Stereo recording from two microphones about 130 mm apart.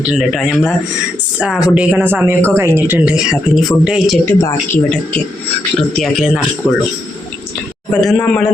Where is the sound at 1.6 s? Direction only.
10° right (ahead or behind).